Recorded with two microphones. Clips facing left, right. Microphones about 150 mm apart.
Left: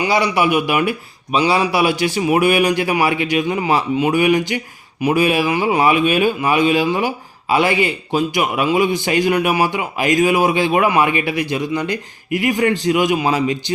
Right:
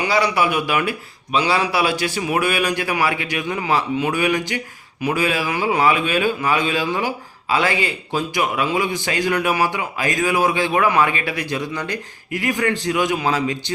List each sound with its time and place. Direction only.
0.0 s speech: 15° left (ahead or behind)